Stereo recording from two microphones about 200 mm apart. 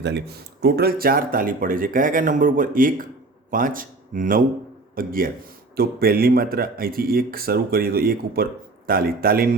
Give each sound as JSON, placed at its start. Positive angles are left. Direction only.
{"t": 0.0, "sound": "speech", "side_deg": -55}